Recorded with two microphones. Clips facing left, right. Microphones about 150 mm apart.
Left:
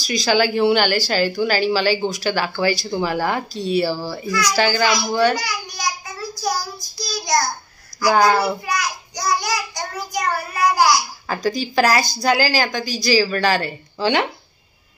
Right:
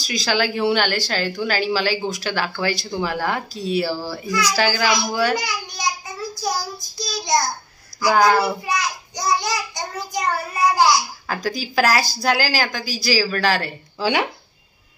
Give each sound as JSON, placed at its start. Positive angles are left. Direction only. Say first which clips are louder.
{"t": 0.0, "sound": "speech", "louder": "left 4 dB", "side_deg": 0}
{"t": 5.4, "sound": "a child's voice", "louder": "even", "side_deg": -20}
{"t": 7.0, "sound": "a child's voice", "louder": "even", "side_deg": -25}
{"t": 8.1, "sound": "speech", "louder": "even", "side_deg": 0}
{"t": 8.6, "sound": "a child's voice", "louder": "even", "side_deg": -25}
{"t": 11.2, "sound": "speech", "louder": "left 3 dB", "side_deg": 0}